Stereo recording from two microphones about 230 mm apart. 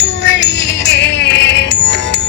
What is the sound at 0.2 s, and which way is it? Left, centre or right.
Music, left.